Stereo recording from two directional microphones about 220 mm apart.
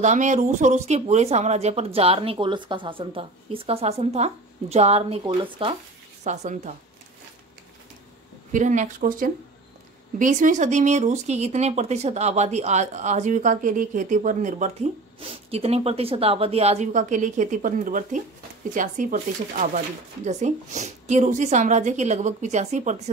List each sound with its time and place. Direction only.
0.0 s speech: 35° right (ahead or behind)
8.5 s speech: 35° right (ahead or behind)